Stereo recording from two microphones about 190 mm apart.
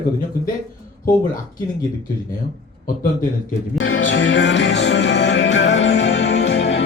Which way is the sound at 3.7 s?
90° left.